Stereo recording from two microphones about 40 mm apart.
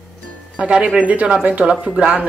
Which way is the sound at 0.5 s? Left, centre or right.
Right.